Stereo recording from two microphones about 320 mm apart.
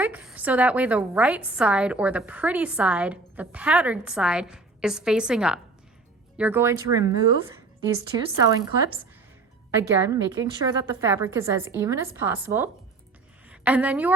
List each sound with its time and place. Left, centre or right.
0.0 s a woman's voice: centre
9.9 s a woman's voice: centre